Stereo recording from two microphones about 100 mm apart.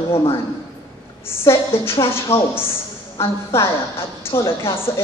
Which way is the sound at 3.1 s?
25° left (ahead or behind).